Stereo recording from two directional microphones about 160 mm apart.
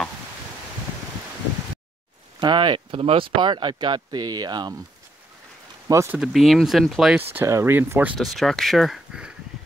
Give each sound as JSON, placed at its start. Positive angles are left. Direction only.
{"t": 2.4, "sound": "speech", "side_deg": -30}
{"t": 5.9, "sound": "speech", "side_deg": -20}
{"t": 6.1, "sound": "speech", "side_deg": 0}
{"t": 7.3, "sound": "speech", "side_deg": -15}